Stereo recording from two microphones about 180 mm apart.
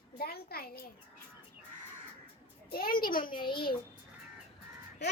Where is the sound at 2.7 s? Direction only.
55° left (ahead or behind).